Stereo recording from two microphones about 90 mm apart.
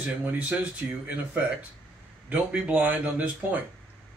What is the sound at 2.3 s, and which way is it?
Speech, 15° right (ahead or behind).